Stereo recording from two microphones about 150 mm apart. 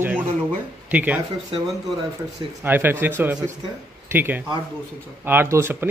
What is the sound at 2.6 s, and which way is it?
A man's voice, 15° right (ahead or behind).